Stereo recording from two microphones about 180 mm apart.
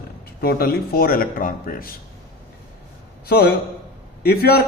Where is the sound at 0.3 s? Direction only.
55° left (ahead or behind).